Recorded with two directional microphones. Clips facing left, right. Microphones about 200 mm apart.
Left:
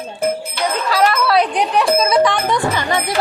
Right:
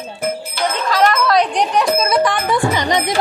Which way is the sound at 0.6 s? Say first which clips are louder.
Right 1 dB; 10° left (ahead or behind).